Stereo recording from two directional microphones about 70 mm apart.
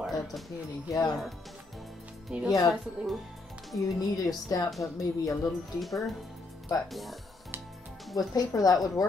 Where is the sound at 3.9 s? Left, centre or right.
Left.